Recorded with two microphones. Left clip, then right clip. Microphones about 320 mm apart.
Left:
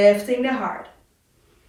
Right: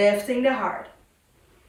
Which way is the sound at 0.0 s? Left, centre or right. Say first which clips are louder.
Left 3 dB; centre.